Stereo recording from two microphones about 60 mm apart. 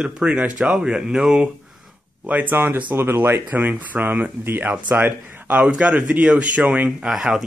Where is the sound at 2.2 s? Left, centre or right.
Right.